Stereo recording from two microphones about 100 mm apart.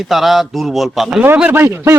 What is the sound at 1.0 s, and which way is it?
Speech, 15° right (ahead or behind).